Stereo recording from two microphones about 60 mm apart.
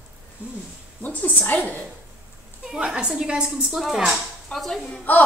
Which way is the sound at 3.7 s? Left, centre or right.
Centre.